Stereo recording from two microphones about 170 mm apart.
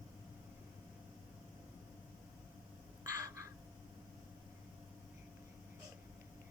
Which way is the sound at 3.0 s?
20° right (ahead or behind).